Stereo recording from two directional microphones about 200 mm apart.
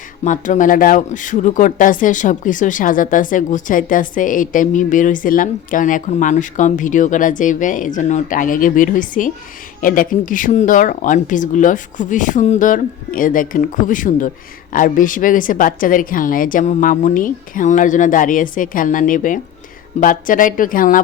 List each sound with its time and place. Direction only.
0.3 s speech: 40° left (ahead or behind)